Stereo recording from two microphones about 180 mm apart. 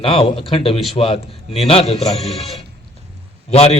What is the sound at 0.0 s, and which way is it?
A man's voice, 30° left (ahead or behind).